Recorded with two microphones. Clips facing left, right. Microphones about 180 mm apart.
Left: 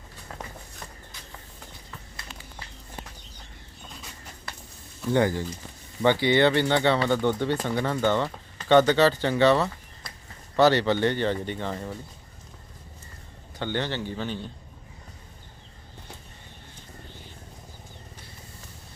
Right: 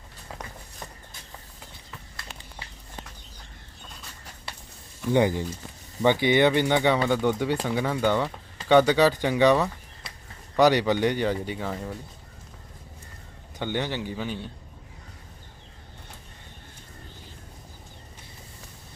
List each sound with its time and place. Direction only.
5.0 s speech: 15° right (ahead or behind); by 11.9 s centre (ahead or behind)
13.6 s speech: 15° right (ahead or behind)